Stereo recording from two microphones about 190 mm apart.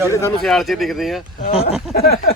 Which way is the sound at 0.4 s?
Centre (ahead or behind).